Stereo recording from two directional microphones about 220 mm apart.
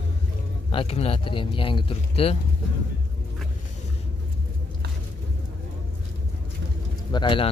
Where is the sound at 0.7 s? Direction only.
25° left (ahead or behind).